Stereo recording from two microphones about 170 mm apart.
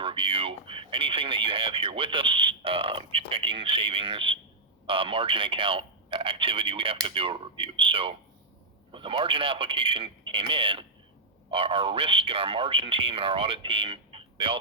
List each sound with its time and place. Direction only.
0.0 s a man's voice: 30° right (ahead or behind)